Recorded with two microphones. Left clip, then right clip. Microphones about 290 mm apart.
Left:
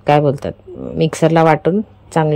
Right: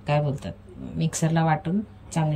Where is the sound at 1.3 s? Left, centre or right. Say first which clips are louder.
Left 11 dB; left.